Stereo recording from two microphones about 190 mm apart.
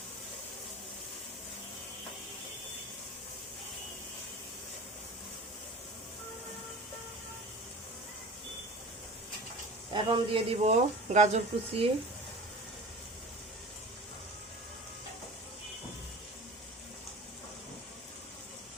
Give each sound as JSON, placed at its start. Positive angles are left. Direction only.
{"t": 9.9, "sound": "speech", "side_deg": -25}